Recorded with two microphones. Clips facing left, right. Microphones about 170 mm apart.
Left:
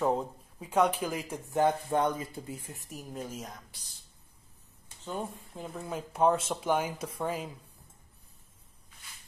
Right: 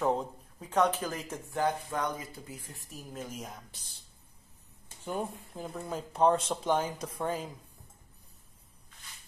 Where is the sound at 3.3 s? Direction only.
5° right (ahead or behind).